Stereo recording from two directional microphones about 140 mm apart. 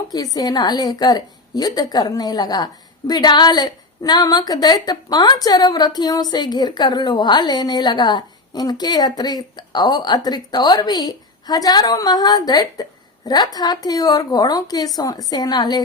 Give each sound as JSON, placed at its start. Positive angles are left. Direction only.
{"t": 0.1, "sound": "a woman's voice", "side_deg": 25}